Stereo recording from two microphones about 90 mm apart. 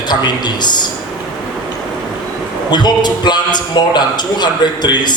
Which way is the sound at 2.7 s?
55° left (ahead or behind).